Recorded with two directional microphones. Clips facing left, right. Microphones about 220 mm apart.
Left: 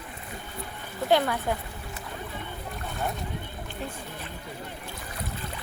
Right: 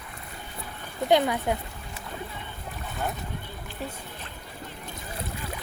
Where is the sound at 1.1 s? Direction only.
20° right (ahead or behind).